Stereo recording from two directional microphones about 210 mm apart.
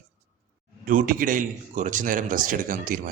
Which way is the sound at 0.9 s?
40° right (ahead or behind).